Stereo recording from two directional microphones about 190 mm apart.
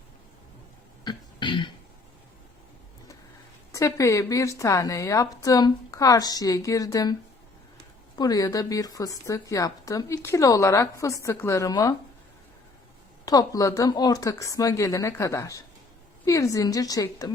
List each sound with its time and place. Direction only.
1.0 s cough: 25° left (ahead or behind)
3.7 s a woman's voice: 15° left (ahead or behind)
13.2 s a woman's voice: 20° left (ahead or behind)